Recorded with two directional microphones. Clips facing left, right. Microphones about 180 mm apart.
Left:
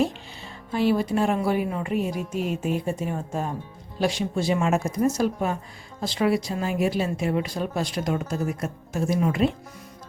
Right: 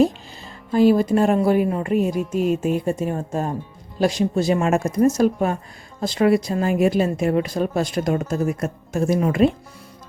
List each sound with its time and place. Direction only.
0.0 s speech: 45° right (ahead or behind)